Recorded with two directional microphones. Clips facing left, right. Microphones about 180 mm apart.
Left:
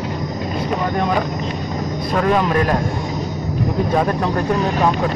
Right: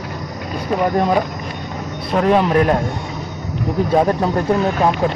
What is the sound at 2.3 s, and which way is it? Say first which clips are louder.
Speech: right 4 dB; 25° right (ahead or behind).